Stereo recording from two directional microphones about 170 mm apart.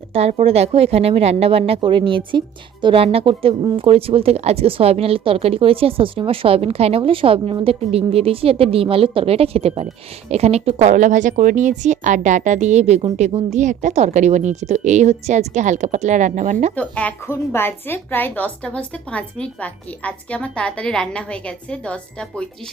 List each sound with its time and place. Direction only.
0.1 s a woman's voice: 40° right (ahead or behind)
16.7 s a woman's voice: 10° left (ahead or behind)